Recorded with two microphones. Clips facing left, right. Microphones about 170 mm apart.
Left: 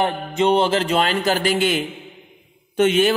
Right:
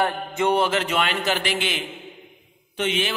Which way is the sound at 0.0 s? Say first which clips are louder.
Left 3 dB; 20° left (ahead or behind).